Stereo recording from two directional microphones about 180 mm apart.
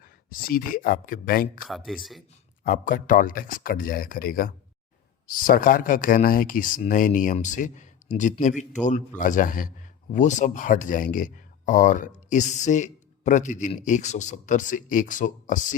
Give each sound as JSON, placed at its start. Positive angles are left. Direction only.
{"t": 0.3, "sound": "speech", "side_deg": 55}
{"t": 1.6, "sound": "speech", "side_deg": 0}
{"t": 2.6, "sound": "speech", "side_deg": 50}